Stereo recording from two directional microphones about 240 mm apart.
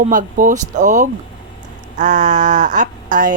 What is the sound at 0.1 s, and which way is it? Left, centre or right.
Speech, right.